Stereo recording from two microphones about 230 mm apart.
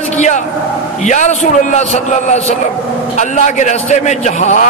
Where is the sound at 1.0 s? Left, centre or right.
Left.